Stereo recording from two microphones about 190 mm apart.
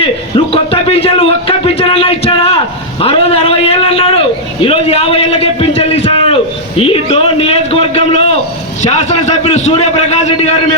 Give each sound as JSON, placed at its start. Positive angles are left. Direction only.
{"t": 0.0, "sound": "a man's voice", "side_deg": 30}